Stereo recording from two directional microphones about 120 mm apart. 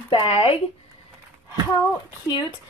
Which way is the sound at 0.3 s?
50° left (ahead or behind).